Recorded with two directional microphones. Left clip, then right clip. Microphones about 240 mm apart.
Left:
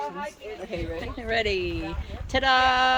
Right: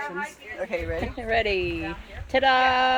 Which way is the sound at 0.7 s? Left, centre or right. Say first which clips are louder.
Right 4 dB; centre.